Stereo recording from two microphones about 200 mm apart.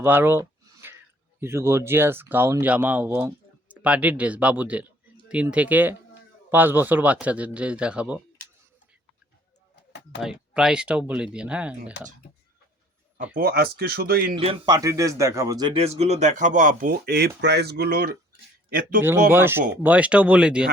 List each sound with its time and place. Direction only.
0.0 s a sound: 10° right (ahead or behind)
1.4 s speech: 10° right (ahead or behind)
10.2 s speech: 5° right (ahead or behind)
13.3 s speech: 50° right (ahead or behind)
14.3 s speech: 25° right (ahead or behind); by 18.9 s 45° right (ahead or behind)
19.3 s speech: 10° right (ahead or behind)